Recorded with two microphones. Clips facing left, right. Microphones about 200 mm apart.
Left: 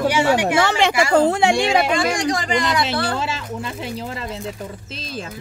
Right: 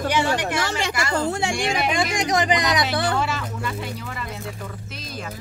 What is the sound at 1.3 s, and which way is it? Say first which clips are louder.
Speech: left 8 dB; 65° left (ahead or behind).